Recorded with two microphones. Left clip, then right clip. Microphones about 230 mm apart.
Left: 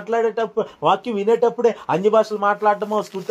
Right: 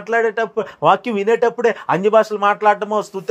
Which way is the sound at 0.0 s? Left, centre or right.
Right.